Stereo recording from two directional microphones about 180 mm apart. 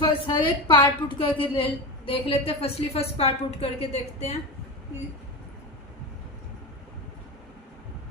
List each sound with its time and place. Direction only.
0.0 s a woman's voice: 20° left (ahead or behind)